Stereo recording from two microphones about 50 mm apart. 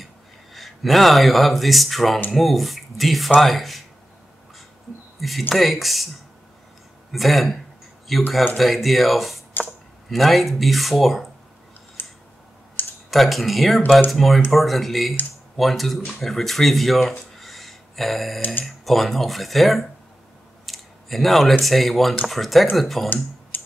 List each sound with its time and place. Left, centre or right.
0.0 s speech: centre
5.5 s speech: centre
7.1 s speech: centre
12.0 s scissors: left
12.8 s computer keyboard: left
13.1 s speech: centre
18.4 s speech: left
18.7 s speech: centre
23.5 s music: left